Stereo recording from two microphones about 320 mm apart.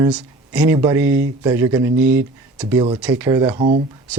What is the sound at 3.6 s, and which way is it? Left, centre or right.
Speech, right.